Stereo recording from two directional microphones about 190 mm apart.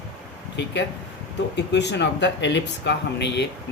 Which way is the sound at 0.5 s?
70° left (ahead or behind).